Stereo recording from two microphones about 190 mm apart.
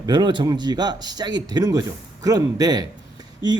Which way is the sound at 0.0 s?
25° right (ahead or behind).